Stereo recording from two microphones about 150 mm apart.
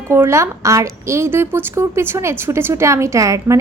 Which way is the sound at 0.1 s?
20° right (ahead or behind).